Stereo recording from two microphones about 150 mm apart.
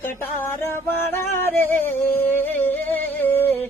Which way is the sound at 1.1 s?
15° left (ahead or behind).